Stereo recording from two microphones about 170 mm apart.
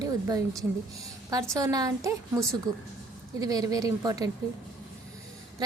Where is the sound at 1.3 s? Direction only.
20° right (ahead or behind).